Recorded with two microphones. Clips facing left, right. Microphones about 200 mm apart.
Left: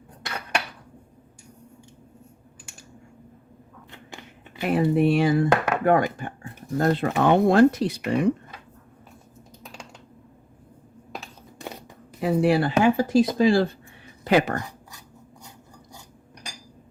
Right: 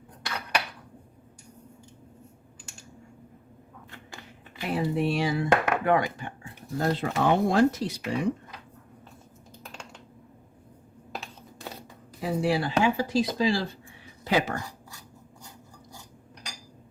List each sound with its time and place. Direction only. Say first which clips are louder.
4.6 s speech: left 6 dB; 60° left (ahead or behind)
12.2 s speech: left 6 dB; 60° left (ahead or behind)